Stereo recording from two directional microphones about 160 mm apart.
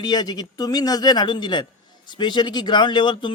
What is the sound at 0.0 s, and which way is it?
Speech, 25° left (ahead or behind).